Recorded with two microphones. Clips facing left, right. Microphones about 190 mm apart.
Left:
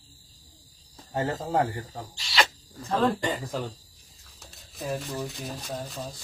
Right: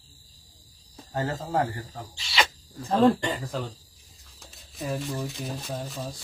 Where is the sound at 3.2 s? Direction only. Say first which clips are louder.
Left 1 dB; centre (ahead or behind).